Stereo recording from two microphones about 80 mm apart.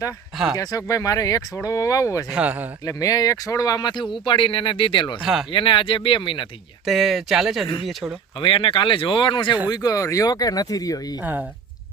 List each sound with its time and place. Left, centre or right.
0.5 s speech: left
2.3 s speech: centre
2.8 s speech: left
4.1 s speech: left
5.2 s speech: centre
5.5 s speech: left
6.8 s speech: centre
8.4 s speech: left
9.6 s speech: left
11.2 s speech: right